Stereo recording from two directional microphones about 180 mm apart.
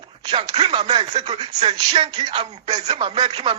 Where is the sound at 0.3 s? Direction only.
30° right (ahead or behind).